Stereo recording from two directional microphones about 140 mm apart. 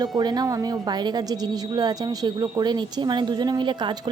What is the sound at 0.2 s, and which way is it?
A woman's voice, 30° right (ahead or behind).